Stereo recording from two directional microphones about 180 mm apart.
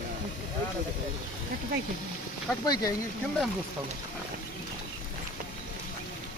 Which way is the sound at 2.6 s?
20° left (ahead or behind).